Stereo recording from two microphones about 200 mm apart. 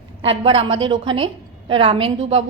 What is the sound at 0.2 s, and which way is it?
A woman's voice, 25° right (ahead or behind).